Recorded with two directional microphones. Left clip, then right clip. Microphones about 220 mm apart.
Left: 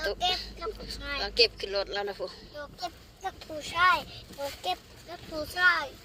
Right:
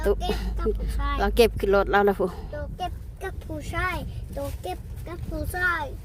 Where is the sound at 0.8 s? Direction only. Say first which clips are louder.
Right 6 dB; 40° right (ahead or behind).